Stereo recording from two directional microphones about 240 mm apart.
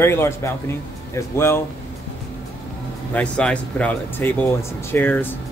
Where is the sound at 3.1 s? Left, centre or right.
Centre.